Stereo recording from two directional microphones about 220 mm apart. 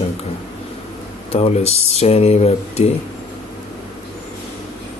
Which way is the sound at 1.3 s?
30° left (ahead or behind).